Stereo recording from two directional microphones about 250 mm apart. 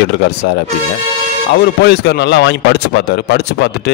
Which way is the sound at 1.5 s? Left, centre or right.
Left.